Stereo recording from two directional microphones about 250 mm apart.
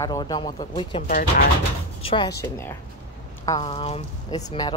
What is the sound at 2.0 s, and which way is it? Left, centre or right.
Speech, centre.